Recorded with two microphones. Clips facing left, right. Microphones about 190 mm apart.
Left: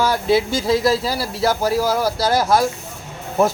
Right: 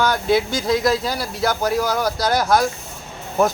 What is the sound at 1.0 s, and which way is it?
Speech, 5° left (ahead or behind).